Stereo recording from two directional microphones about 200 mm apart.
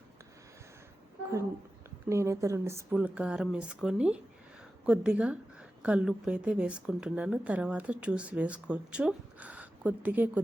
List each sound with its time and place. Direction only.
2.0 s speech: 15° right (ahead or behind)